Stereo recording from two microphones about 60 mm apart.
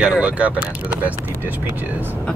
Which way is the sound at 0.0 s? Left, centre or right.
Centre.